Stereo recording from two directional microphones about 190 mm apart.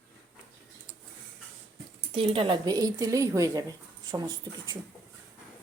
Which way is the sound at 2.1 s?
30° right (ahead or behind).